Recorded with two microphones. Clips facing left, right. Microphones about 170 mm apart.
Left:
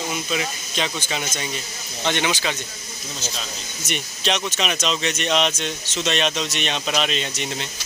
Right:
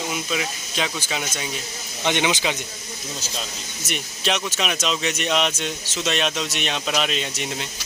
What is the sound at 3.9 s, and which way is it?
Speech, 5° right (ahead or behind).